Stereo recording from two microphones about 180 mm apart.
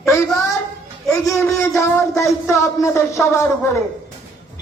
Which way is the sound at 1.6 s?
15° left (ahead or behind).